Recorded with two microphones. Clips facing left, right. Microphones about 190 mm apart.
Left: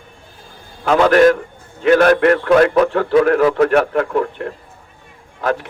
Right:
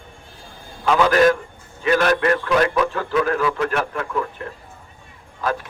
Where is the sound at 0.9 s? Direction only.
55° left (ahead or behind).